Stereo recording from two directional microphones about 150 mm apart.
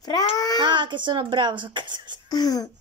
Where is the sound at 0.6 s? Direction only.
30° right (ahead or behind).